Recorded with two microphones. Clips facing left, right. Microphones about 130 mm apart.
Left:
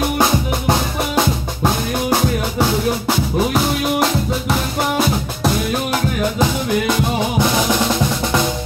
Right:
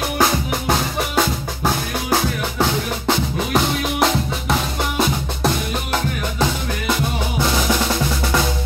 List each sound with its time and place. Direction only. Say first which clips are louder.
0.2 s drum: left 2 dB; 15° left (ahead or behind)
2.6 s music: left 2 dB; 5° left (ahead or behind)